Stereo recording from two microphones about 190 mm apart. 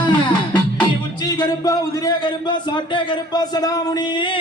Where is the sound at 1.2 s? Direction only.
20° left (ahead or behind).